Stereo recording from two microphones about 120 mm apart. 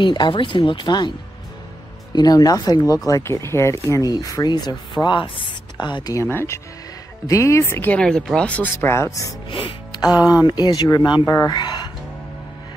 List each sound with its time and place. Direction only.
0.0 s speech: 40° left (ahead or behind)
2.1 s speech: 35° left (ahead or behind)
6.2 s speech: 20° left (ahead or behind)
8.9 s speech: 25° left (ahead or behind)
9.5 s speech: 45° left (ahead or behind)
10.0 s speech: 15° right (ahead or behind)
10.3 s speech: 35° left (ahead or behind)